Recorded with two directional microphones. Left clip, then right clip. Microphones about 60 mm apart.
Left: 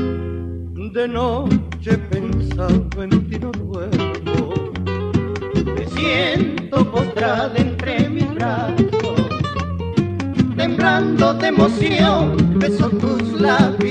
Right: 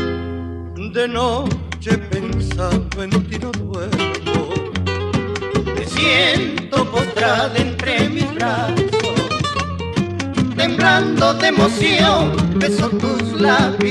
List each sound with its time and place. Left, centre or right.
1.1 s music: left
3.9 s speech: left
5.7 s music: left
9.1 s music: left
10.9 s music: left
11.1 s music: left
12.1 s music: left
13.2 s music: left